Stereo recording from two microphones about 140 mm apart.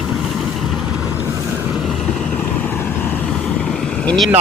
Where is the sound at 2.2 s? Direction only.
15° left (ahead or behind).